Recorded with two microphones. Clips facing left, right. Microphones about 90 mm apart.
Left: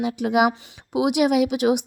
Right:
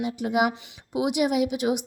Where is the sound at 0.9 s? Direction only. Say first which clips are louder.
Left 4 dB; 75° left (ahead or behind).